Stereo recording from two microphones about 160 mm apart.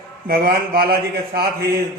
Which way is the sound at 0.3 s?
70° right (ahead or behind).